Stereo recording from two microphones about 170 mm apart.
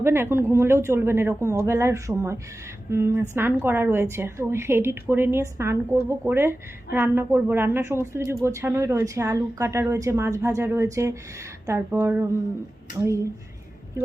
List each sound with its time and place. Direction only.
0.0 s a woman's voice: 15° right (ahead or behind)